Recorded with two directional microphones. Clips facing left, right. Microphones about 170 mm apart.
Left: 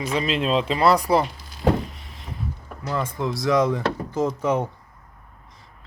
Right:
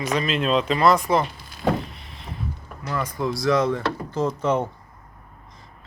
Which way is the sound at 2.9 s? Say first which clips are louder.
Even; 25° left (ahead or behind).